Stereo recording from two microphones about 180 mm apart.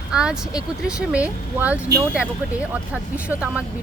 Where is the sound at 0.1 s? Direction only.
5° right (ahead or behind).